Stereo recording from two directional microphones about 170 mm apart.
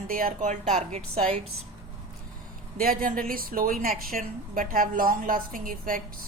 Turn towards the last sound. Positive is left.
turn(degrees=-55)  # may be behind; listen again after turning